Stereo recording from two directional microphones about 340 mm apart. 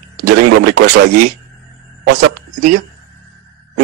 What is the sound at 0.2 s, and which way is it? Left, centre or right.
Speech, right.